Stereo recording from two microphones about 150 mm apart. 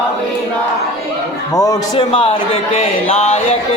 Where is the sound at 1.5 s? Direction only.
25° left (ahead or behind).